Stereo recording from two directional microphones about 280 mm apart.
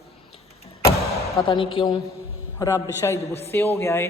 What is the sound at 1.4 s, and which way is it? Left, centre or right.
A man's voice, centre.